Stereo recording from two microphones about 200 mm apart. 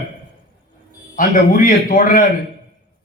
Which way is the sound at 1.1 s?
50° left (ahead or behind).